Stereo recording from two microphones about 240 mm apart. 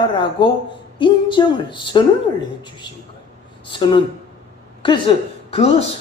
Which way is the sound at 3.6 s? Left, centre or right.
Centre.